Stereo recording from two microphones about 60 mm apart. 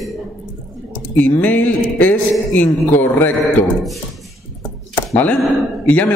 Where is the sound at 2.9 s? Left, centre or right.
Left.